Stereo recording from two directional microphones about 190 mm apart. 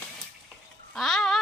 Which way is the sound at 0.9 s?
Centre (ahead or behind).